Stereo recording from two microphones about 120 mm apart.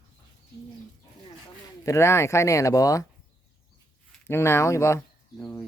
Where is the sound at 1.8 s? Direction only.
25° left (ahead or behind).